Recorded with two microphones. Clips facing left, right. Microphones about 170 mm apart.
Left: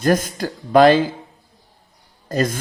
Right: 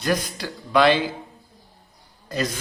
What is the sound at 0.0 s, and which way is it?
Speech, 45° left (ahead or behind).